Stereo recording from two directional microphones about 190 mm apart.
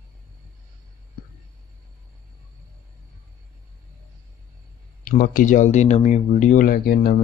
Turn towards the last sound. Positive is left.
turn(degrees=55)  # may be behind; listen again after turning